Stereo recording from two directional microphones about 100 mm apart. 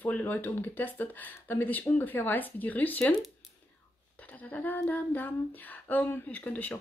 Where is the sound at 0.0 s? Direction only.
15° left (ahead or behind).